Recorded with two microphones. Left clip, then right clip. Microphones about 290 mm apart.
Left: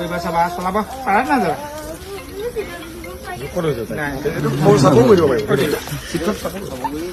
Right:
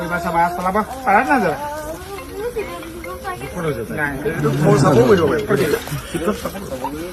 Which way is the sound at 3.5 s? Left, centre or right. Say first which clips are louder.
Left 5 dB; left.